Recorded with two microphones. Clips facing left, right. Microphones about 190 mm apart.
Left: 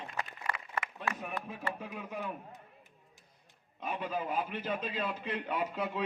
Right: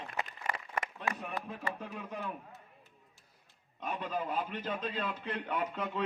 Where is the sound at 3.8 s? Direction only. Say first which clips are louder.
Left 1 dB; 10° left (ahead or behind).